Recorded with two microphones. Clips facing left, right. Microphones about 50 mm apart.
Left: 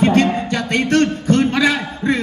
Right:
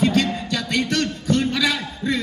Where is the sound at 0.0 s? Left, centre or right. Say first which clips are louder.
Left 5 dB; left.